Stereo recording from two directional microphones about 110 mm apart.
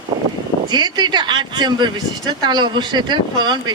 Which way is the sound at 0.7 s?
40° right (ahead or behind).